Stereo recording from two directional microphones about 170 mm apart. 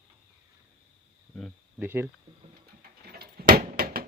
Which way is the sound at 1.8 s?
15° right (ahead or behind).